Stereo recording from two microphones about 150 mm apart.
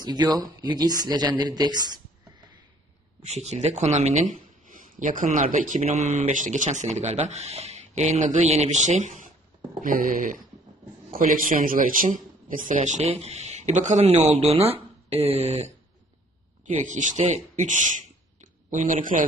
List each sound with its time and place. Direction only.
0.0 s speech: 30° right (ahead or behind)
3.2 s a man's voice: 45° right (ahead or behind)
4.7 s a man's voice: 60° right (ahead or behind)
9.8 s a man's voice: 70° right (ahead or behind); by 15.7 s 45° right (ahead or behind)
16.6 s speech: 55° right (ahead or behind)